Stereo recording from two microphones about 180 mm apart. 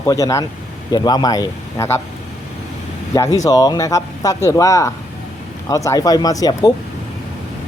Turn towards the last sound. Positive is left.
turn(degrees=20)  # may be behind; listen again after turning